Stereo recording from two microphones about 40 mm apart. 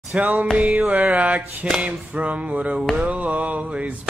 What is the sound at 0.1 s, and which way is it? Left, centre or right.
Music, right.